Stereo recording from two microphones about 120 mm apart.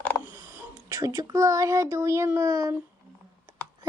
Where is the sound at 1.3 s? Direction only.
25° right (ahead or behind).